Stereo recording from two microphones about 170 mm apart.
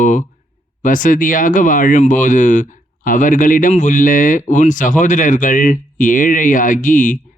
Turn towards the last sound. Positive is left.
turn(degrees=50)  # may be behind; listen again after turning